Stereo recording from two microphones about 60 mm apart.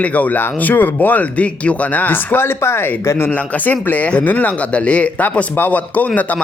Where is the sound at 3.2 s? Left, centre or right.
Left.